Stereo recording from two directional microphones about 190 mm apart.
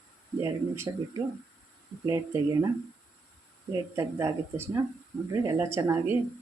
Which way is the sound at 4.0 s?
15° right (ahead or behind).